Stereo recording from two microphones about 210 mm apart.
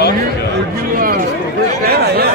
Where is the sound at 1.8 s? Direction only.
50° right (ahead or behind).